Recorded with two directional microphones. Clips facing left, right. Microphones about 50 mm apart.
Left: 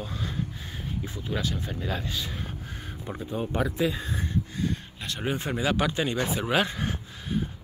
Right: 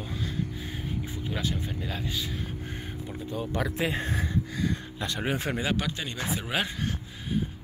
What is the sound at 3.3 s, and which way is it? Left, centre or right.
Speech, left.